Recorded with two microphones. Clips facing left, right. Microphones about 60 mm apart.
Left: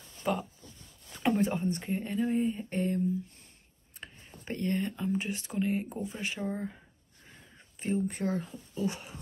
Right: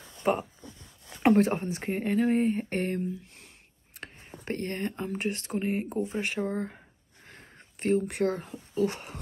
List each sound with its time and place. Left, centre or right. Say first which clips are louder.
0.0 s dog: right 5 dB; right
1.2 s speech: right 5 dB; right
4.5 s speech: even; right
5.5 s speech: left 2 dB; right
6.4 s speech: right 4 dB; right
7.8 s speech: right 6 dB; right
8.3 s speech: right 2 dB; right